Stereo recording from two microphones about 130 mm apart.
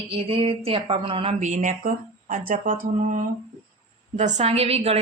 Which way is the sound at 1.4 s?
75° right (ahead or behind).